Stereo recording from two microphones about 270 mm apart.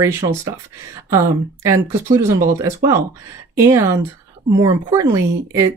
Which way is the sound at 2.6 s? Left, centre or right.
Centre.